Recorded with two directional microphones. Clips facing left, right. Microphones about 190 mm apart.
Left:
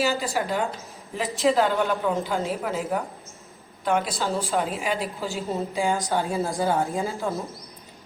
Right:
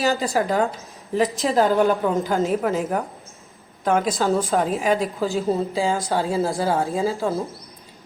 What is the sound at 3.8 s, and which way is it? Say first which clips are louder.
A woman's voice: right 4 dB; 45° right (ahead or behind).